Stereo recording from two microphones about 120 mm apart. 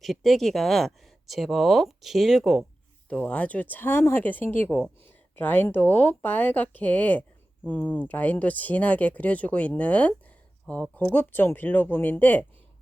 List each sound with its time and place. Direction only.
0.0 s speech: centre (ahead or behind)
3.1 s speech: 10° left (ahead or behind)